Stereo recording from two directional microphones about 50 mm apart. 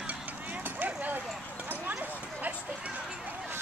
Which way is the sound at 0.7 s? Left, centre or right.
Right.